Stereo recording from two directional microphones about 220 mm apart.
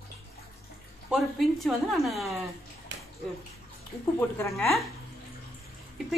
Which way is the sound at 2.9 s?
55° right (ahead or behind).